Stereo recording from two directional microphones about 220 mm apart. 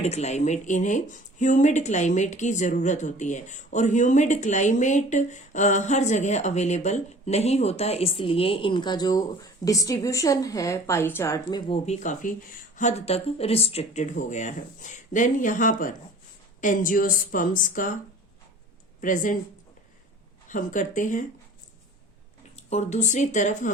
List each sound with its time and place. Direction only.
0.0 s speech: 30° left (ahead or behind)
11.9 s speech: 35° left (ahead or behind)
19.0 s speech: 35° left (ahead or behind)
20.5 s speech: 35° left (ahead or behind)
22.5 s speech: 30° left (ahead or behind)